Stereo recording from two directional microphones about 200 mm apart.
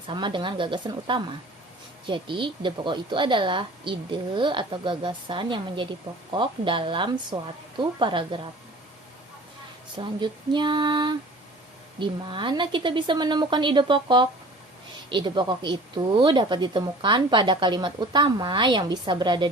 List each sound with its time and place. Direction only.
0.1 s speech: 25° right (ahead or behind)
10.0 s speech: 25° right (ahead or behind)